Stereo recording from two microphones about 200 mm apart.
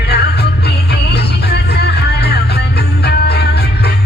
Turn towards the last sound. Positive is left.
turn(degrees=55)  # may be behind; listen again after turning